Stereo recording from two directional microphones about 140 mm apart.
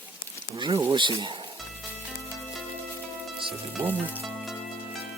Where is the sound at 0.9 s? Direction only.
35° right (ahead or behind).